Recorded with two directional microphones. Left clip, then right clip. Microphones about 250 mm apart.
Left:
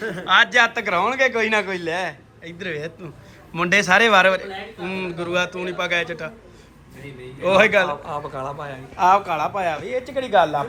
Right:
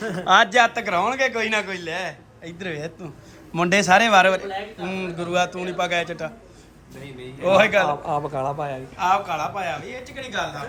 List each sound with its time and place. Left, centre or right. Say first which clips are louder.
0.0 s a man's voice: even; right
7.4 s a man's voice: left 1 dB; centre
8.0 s speech: right 4 dB; right
9.0 s a man's voice: left 5 dB; centre